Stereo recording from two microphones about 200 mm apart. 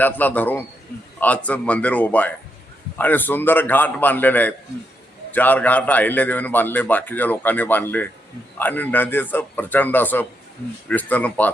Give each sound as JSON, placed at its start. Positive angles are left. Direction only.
{"t": 0.0, "sound": "a man's voice", "side_deg": 10}